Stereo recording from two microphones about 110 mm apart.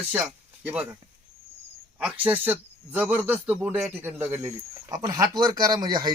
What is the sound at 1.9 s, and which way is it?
Speech, 10° right (ahead or behind).